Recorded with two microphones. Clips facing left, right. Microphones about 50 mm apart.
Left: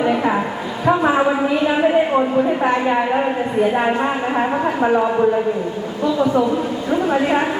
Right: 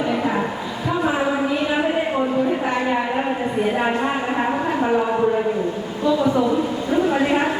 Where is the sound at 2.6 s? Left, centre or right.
Centre.